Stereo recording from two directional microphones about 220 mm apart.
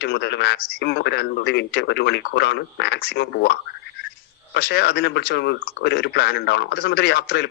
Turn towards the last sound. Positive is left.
turn(degrees=50)  # may be behind; listen again after turning